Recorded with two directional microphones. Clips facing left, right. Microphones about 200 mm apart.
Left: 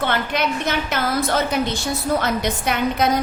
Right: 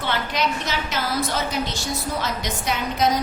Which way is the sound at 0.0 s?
55° left (ahead or behind).